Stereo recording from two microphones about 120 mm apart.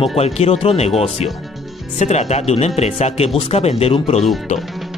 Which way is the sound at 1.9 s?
70° left (ahead or behind).